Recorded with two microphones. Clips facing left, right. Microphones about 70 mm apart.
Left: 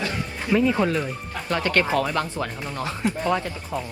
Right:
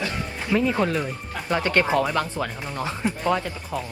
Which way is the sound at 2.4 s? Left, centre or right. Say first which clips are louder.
Even; centre.